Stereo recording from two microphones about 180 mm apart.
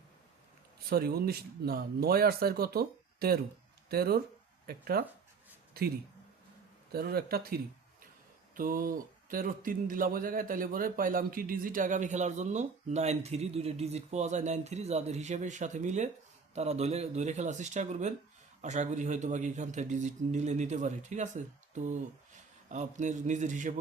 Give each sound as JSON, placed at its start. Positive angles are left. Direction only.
{"t": 0.9, "sound": "speech", "side_deg": -60}
{"t": 6.9, "sound": "a man's voice", "side_deg": -60}